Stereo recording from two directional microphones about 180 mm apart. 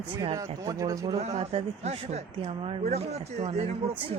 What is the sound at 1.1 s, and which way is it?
A man's voice, 35° right (ahead or behind).